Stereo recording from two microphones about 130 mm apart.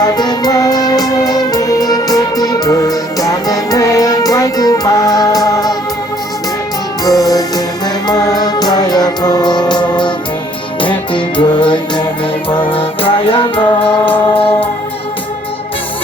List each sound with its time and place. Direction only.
0.0 s music: 30° left (ahead or behind)
7.0 s music: 30° left (ahead or behind)